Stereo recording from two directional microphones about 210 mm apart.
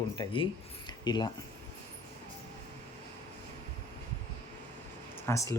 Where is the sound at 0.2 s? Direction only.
20° left (ahead or behind).